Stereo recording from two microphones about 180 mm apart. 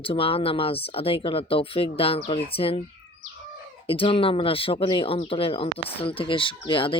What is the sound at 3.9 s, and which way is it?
Speech, 30° left (ahead or behind).